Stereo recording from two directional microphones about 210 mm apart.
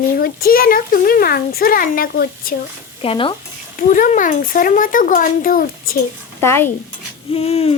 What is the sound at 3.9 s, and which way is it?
A child's voice, 40° left (ahead or behind).